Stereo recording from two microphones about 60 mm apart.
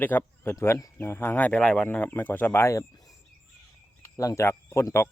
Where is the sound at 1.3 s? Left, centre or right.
Left.